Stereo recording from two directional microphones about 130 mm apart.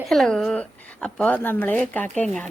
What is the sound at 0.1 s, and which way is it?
Speech, 5° left (ahead or behind).